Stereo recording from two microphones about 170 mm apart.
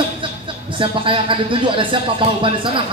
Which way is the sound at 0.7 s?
30° right (ahead or behind).